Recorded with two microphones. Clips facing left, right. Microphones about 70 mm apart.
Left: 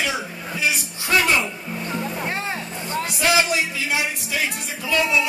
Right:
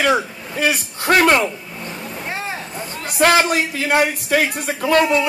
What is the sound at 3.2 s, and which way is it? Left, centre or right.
Speech, right.